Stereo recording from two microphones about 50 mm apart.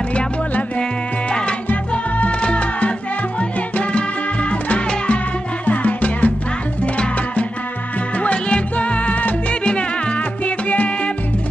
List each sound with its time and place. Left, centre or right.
0.1 s music: left